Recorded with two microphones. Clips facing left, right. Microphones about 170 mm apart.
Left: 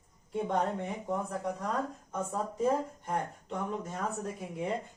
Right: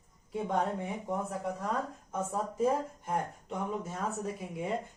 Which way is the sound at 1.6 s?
5° right (ahead or behind).